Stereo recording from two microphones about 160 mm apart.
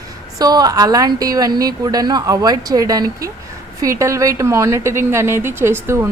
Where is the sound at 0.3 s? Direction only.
25° right (ahead or behind).